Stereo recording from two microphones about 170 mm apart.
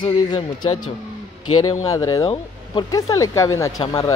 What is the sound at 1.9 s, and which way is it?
Speech, 20° left (ahead or behind).